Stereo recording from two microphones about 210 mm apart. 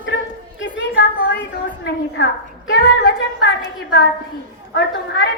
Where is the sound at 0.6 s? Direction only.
50° left (ahead or behind).